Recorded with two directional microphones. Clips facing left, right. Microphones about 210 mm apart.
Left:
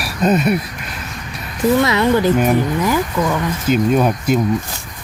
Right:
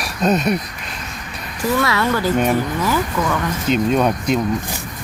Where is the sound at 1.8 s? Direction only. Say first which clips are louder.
Left 4 dB; 20° left (ahead or behind).